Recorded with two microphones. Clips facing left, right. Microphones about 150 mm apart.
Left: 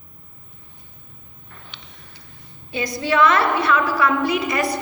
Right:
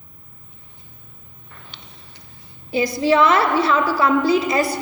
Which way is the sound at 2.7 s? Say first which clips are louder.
Right 5 dB; 30° right (ahead or behind).